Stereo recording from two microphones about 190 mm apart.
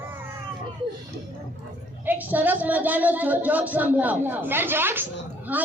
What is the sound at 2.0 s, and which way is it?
A man's voice, 10° right (ahead or behind).